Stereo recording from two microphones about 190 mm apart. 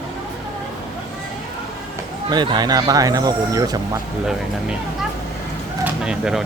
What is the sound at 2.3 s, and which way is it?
Speech, 25° right (ahead or behind).